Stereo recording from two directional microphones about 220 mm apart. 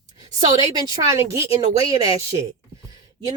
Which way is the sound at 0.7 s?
15° right (ahead or behind).